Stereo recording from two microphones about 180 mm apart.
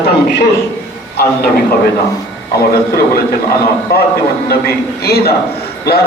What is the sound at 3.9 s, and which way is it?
A man's voice, 60° left (ahead or behind).